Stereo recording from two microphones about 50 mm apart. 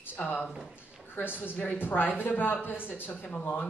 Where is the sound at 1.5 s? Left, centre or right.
Left.